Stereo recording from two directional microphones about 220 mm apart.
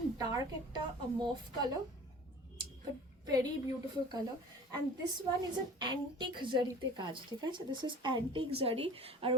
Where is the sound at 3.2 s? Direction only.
15° right (ahead or behind).